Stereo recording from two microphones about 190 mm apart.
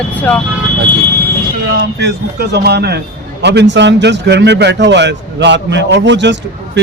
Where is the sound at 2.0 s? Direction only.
60° right (ahead or behind).